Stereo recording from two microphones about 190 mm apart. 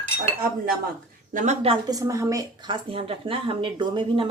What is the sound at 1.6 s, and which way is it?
A woman's voice, 25° right (ahead or behind).